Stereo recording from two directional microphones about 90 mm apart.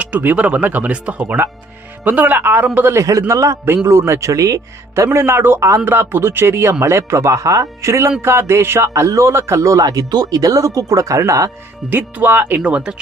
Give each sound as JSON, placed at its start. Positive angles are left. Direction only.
{"t": 0.0, "sound": "speech", "side_deg": -20}
{"t": 2.9, "sound": "speech", "side_deg": -35}
{"t": 11.9, "sound": "speech", "side_deg": -20}